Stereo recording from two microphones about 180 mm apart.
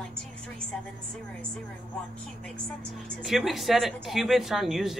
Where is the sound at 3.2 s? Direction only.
Centre (ahead or behind).